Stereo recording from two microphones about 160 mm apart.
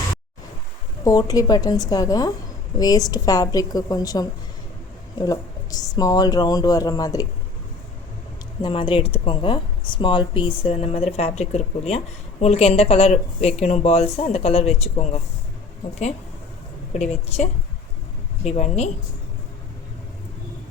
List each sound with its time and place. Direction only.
1.0 s speech: 20° left (ahead or behind)
8.6 s speech: 30° left (ahead or behind)
17.0 s a woman's voice: 40° left (ahead or behind)